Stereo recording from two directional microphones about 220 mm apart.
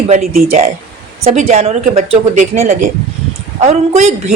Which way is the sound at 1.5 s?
30° right (ahead or behind).